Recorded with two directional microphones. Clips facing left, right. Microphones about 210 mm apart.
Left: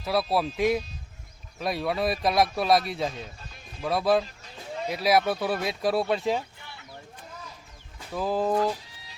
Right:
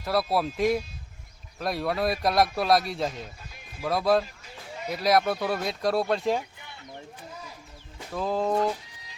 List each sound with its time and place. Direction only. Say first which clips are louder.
0.0 s speech: even; centre (ahead or behind)
6.6 s chicken: right 2 dB; 20° right (ahead or behind)
8.1 s speech: left 1 dB; 5° left (ahead or behind)